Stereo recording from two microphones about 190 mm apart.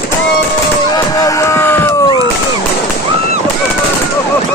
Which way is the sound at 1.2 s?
15° left (ahead or behind).